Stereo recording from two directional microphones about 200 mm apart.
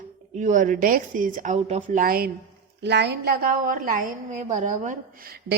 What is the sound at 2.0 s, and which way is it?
A woman's voice, 50° right (ahead or behind).